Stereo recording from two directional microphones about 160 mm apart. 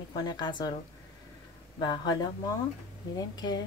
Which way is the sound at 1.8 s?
25° left (ahead or behind).